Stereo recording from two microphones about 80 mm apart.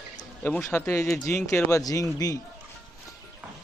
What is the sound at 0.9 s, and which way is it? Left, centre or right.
A man's voice, left.